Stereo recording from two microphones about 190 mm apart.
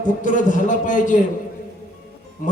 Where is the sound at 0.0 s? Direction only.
40° left (ahead or behind).